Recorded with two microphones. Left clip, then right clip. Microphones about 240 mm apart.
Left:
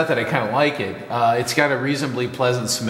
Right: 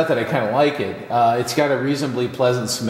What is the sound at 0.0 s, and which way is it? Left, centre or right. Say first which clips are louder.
A man's voice: right 1 dB; centre.